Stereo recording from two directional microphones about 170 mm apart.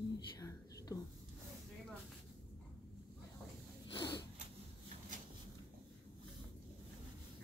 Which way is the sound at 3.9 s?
30° left (ahead or behind).